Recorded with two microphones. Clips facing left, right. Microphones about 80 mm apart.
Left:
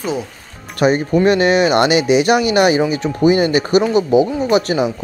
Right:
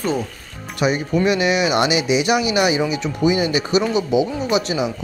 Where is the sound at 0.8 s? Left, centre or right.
Left.